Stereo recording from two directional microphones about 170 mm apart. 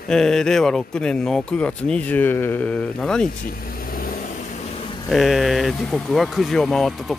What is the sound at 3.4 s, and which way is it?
Vehicle, 60° left (ahead or behind).